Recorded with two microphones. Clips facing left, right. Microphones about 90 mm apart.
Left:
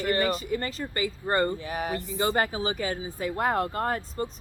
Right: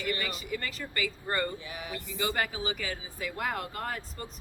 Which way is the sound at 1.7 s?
50° left (ahead or behind).